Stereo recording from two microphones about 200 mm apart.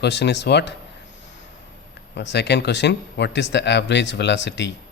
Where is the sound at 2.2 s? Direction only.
60° left (ahead or behind).